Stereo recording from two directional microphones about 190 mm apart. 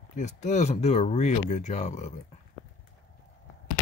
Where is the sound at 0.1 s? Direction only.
40° left (ahead or behind).